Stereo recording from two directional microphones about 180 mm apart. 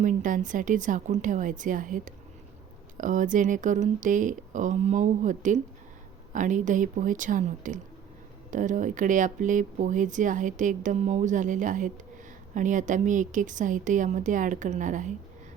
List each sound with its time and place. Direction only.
0.0 s speech: 45° right (ahead or behind)